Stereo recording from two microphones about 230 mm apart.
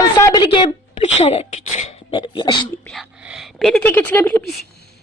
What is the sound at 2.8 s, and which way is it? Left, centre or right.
A woman's voice, centre.